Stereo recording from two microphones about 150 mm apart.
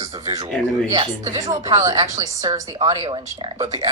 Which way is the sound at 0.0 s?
25° right (ahead or behind).